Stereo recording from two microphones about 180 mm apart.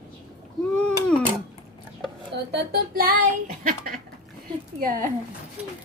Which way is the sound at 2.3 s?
60° right (ahead or behind).